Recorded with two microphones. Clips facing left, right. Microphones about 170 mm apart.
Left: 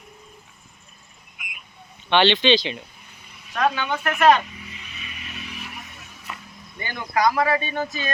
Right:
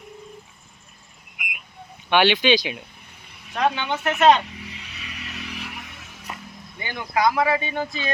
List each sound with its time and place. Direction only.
2.0 s speech: 10° right (ahead or behind)
3.5 s speech: 20° right (ahead or behind)
4.6 s a sound: 75° right (ahead or behind)
6.7 s speech: 15° right (ahead or behind)